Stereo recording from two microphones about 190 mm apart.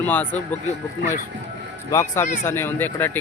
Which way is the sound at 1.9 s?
15° left (ahead or behind).